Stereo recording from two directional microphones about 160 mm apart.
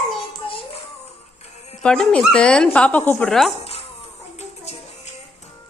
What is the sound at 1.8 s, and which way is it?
A woman's voice, 5° left (ahead or behind).